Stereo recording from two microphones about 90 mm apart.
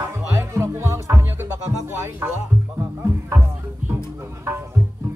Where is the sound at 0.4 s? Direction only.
30° right (ahead or behind).